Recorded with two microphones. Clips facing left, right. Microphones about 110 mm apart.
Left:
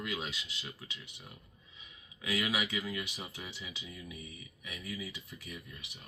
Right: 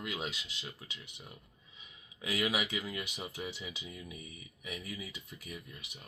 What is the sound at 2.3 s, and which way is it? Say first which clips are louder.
Speech: even; 20° right (ahead or behind).